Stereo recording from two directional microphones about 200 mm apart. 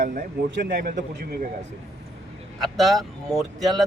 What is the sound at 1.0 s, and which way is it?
Speech, 40° right (ahead or behind).